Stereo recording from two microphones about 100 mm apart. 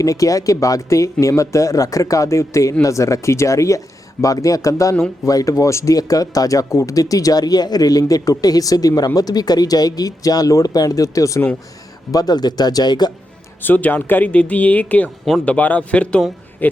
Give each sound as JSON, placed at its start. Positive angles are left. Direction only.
{"t": 0.0, "sound": "speech", "side_deg": 35}
{"t": 13.6, "sound": "speech", "side_deg": 15}